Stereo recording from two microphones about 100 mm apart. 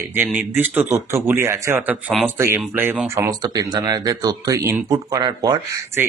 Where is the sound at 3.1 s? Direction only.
40° right (ahead or behind).